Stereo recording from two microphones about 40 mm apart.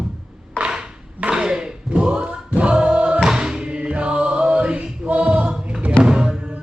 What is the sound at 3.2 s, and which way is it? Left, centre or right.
Music, centre.